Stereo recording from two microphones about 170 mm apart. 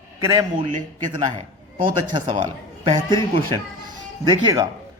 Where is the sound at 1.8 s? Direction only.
25° right (ahead or behind).